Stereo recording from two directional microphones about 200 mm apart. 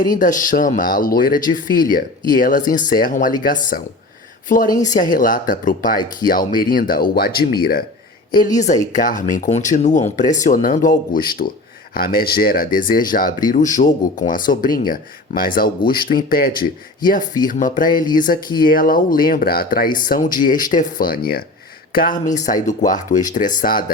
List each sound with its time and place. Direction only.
0.0 s speech: 40° left (ahead or behind)